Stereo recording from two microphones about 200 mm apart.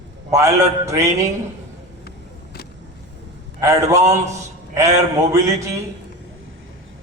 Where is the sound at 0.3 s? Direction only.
15° right (ahead or behind).